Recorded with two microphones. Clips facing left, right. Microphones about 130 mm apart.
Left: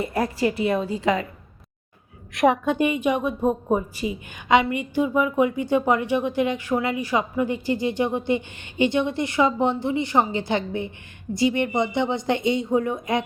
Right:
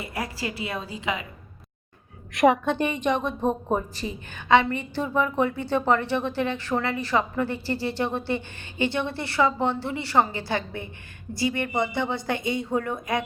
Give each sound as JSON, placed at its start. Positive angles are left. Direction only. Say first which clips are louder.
{"t": 0.9, "sound": "a woman's voice", "louder": "left 7 dB", "side_deg": 35}
{"t": 2.3, "sound": "a woman's voice", "louder": "even", "side_deg": 0}
{"t": 2.7, "sound": "a woman's voice", "louder": "left 3 dB", "side_deg": 10}